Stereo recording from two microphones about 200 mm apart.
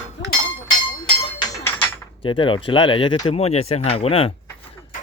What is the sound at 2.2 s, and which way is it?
Speech, 25° left (ahead or behind).